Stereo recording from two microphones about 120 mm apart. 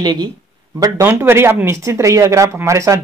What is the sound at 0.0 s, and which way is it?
Speech, 35° right (ahead or behind).